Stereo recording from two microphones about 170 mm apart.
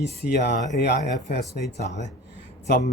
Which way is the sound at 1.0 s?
45° left (ahead or behind).